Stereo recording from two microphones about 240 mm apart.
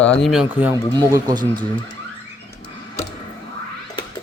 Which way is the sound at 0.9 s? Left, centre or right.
Centre.